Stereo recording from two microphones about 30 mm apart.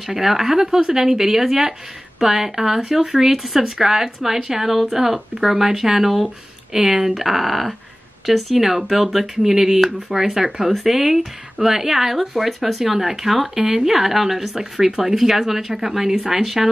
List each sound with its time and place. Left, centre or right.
0.0 s speech: centre
7.2 s speech: centre
14.5 s speech: centre